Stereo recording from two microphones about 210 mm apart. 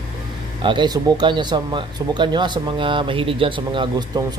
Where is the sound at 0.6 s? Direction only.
20° right (ahead or behind).